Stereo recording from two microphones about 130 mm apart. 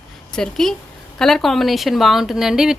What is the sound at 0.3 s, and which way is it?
Speech, 5° left (ahead or behind).